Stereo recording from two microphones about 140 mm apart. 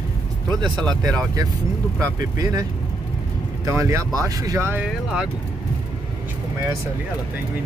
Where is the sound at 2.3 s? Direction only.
25° right (ahead or behind).